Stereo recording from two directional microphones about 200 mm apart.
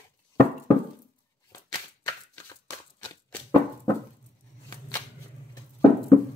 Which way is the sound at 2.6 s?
20° left (ahead or behind).